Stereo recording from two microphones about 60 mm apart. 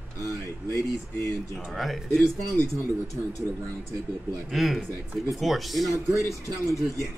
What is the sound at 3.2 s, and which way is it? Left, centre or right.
Speech, right.